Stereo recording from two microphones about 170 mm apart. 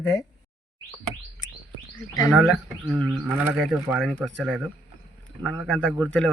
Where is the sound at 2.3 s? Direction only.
5° right (ahead or behind).